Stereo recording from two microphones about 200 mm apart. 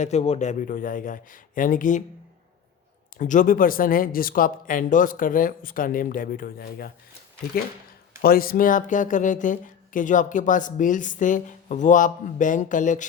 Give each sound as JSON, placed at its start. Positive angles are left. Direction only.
{"t": 0.0, "sound": "speech", "side_deg": 35}
{"t": 3.2, "sound": "speech", "side_deg": 40}
{"t": 8.2, "sound": "speech", "side_deg": 50}